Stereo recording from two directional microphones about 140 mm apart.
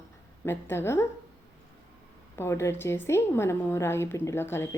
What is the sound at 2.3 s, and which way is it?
A woman's voice, 20° left (ahead or behind).